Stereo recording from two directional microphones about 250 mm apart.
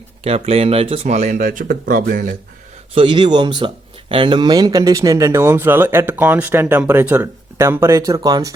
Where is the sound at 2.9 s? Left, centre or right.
Centre.